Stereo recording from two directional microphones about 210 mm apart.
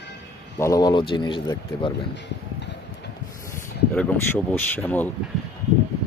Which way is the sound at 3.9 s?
5° left (ahead or behind).